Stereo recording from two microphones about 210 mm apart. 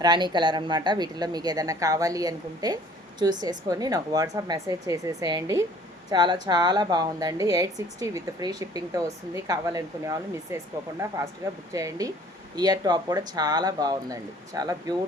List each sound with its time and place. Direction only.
0.0 s a woman's voice: 20° right (ahead or behind)
11.7 s a woman's voice: 15° right (ahead or behind)